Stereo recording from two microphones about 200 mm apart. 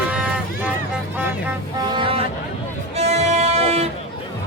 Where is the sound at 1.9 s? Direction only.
25° right (ahead or behind).